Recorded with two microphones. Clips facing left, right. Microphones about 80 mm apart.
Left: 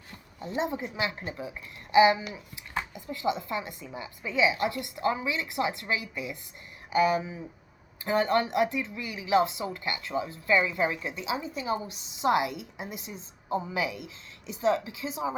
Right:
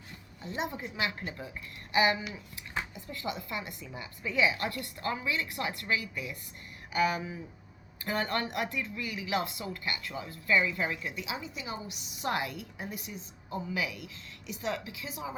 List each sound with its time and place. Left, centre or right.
0.4 s speech: left